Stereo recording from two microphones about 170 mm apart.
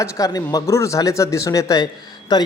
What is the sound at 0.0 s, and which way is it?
A man's voice, 20° left (ahead or behind).